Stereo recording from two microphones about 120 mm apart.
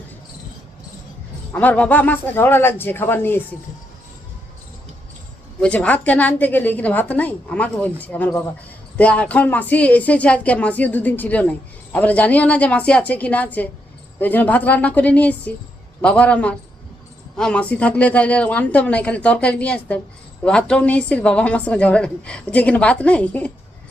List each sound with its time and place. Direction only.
1.5 s speech: 15° left (ahead or behind)
5.5 s speech: 10° left (ahead or behind)